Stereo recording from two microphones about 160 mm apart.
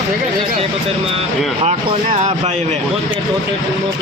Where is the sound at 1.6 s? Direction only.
45° right (ahead or behind).